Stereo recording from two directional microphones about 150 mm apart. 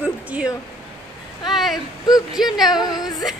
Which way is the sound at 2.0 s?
25° left (ahead or behind).